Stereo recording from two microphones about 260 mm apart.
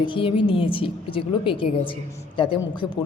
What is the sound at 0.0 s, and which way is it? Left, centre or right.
A man's voice, centre.